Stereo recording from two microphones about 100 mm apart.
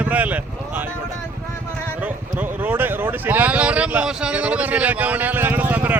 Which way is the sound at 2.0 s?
15° right (ahead or behind).